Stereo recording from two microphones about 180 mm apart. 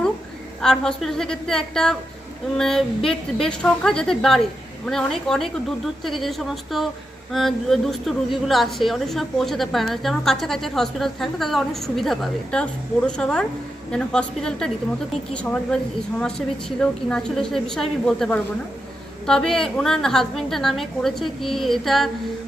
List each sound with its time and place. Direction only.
0.6 s a woman's voice: 5° left (ahead or behind)